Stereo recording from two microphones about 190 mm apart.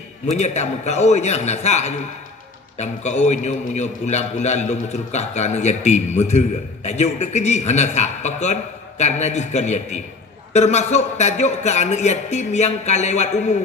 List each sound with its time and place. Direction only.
0.3 s a man's voice: 35° left (ahead or behind)